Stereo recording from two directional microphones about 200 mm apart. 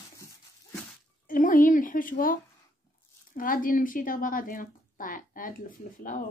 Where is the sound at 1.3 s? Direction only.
40° left (ahead or behind).